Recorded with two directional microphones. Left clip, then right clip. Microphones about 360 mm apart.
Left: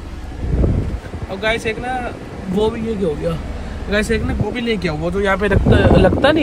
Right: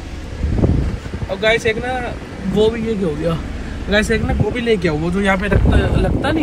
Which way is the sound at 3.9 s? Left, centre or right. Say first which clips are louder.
Right 2 dB; centre.